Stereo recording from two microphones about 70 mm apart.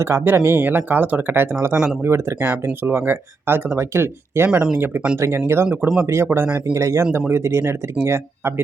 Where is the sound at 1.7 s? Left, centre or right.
Centre.